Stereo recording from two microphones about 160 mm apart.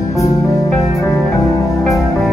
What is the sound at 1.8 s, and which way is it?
Music, centre (ahead or behind).